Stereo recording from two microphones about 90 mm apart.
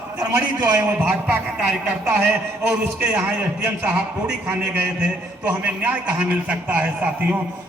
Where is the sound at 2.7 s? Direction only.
15° right (ahead or behind).